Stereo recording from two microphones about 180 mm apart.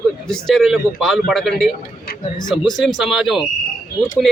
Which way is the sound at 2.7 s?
Centre (ahead or behind).